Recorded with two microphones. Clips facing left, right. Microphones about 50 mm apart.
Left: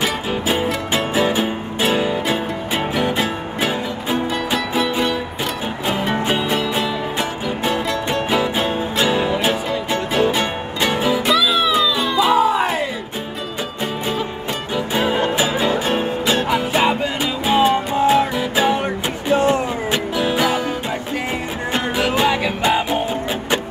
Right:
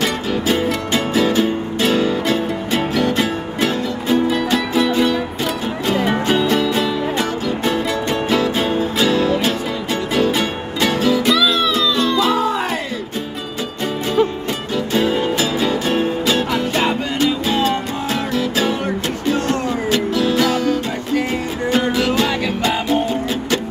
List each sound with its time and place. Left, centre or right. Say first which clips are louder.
0.7 s music: right 1 dB; centre
6.2 s music: right 3 dB; centre
11.3 s music: even; centre
15.0 s music: right 1 dB; centre